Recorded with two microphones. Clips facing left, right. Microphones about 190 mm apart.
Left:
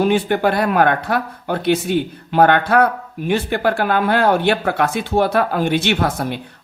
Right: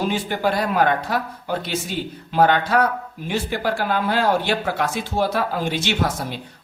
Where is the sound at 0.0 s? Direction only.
60° left (ahead or behind).